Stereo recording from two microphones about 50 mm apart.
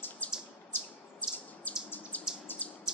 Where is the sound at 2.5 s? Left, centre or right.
Left.